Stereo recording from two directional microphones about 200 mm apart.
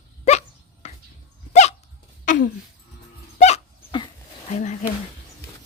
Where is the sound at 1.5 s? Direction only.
35° left (ahead or behind).